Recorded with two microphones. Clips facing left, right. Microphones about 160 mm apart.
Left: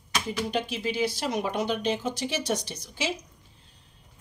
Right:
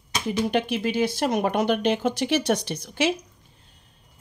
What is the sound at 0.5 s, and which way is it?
A woman's voice, 65° right (ahead or behind).